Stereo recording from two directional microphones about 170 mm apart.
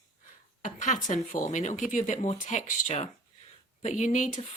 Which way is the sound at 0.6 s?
45° left (ahead or behind).